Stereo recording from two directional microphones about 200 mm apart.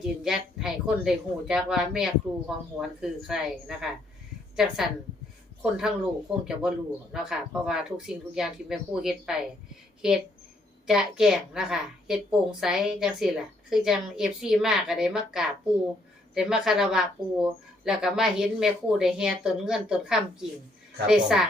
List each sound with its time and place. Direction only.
0.0 s a woman's voice: centre (ahead or behind)